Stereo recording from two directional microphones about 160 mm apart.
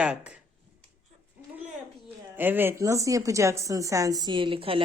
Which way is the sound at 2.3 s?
10° right (ahead or behind).